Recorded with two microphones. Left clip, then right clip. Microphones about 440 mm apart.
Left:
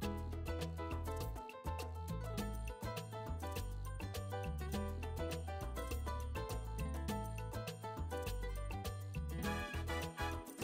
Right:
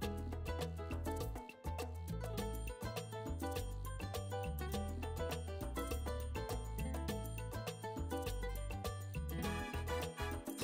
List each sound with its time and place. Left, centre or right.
0.0 s music: right
2.3 s music: right